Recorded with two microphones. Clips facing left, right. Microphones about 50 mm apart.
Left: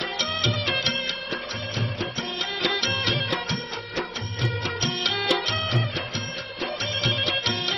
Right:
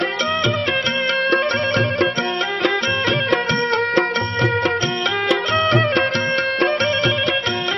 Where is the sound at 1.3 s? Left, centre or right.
Right.